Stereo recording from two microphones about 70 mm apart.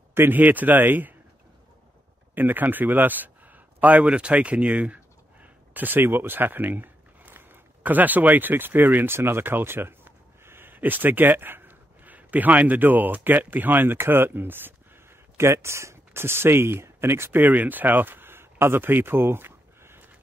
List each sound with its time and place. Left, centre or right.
0.1 s speech: right
2.3 s speech: right